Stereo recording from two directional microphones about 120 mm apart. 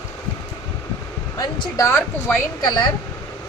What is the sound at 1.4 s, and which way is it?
Speech, 30° left (ahead or behind).